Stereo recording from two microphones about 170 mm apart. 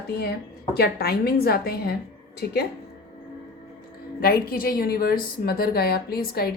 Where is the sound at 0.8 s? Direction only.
65° left (ahead or behind).